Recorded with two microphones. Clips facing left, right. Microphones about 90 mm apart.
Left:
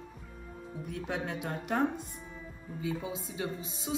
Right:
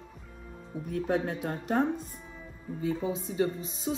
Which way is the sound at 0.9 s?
45° right (ahead or behind).